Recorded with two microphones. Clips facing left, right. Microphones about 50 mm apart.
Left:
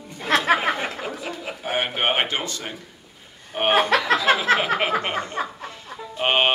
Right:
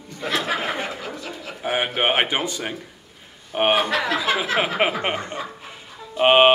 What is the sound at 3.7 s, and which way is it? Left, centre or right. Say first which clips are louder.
Speech: left 5 dB; left.